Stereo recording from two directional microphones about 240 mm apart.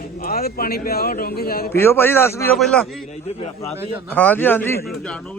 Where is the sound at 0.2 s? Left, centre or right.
Left.